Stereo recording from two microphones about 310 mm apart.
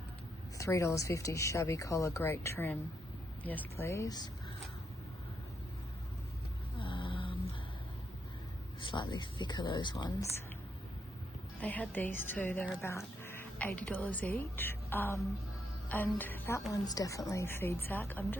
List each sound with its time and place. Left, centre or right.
0.6 s a woman's voice: centre
6.7 s vehicle: centre
8.8 s a woman's voice: centre
11.6 s a woman's voice: centre